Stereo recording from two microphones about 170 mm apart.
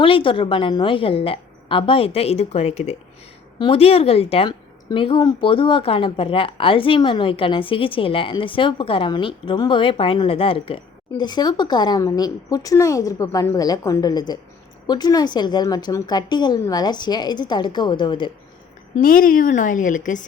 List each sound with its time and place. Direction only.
0.0 s a woman's voice: 30° left (ahead or behind)
18.9 s a woman's voice: 55° left (ahead or behind)